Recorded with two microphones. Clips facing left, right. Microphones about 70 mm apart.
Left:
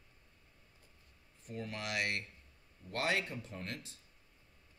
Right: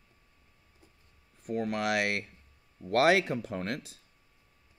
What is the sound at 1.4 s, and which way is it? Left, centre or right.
Speech, right.